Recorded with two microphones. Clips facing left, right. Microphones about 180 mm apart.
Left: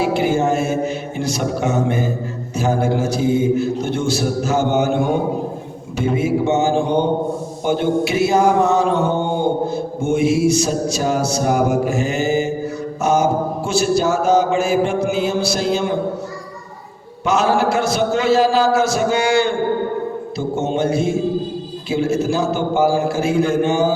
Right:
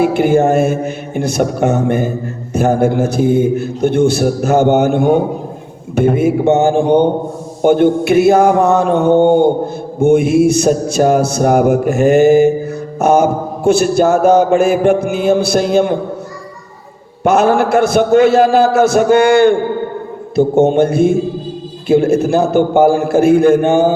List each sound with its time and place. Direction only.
0.0 s mantra: 55° right (ahead or behind)
17.2 s mantra: 55° right (ahead or behind)